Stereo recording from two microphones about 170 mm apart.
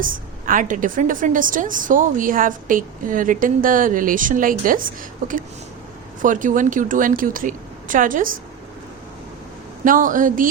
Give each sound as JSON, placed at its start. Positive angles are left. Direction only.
{"t": 0.0, "sound": "a woman's voice", "side_deg": -50}
{"t": 6.2, "sound": "a woman's voice", "side_deg": -50}
{"t": 9.8, "sound": "a woman's voice", "side_deg": -50}